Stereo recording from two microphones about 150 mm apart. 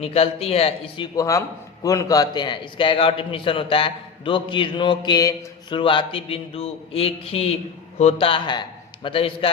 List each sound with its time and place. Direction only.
0.0 s a man's voice: 40° left (ahead or behind)